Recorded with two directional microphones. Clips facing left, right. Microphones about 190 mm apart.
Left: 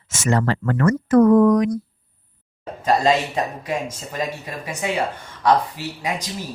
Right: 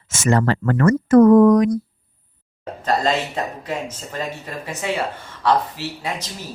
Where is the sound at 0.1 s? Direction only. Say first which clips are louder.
Right 2 dB; 50° right (ahead or behind).